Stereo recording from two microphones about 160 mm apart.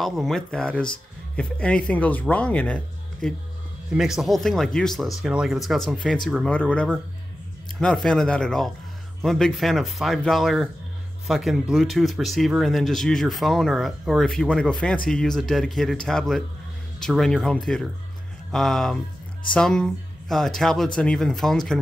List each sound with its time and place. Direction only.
0.0 s speech: centre (ahead or behind)